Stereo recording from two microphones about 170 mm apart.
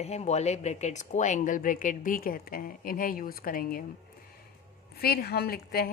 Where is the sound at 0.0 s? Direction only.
40° left (ahead or behind); by 3.8 s 60° left (ahead or behind).